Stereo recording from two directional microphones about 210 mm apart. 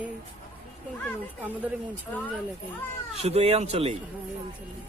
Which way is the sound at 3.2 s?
30° right (ahead or behind).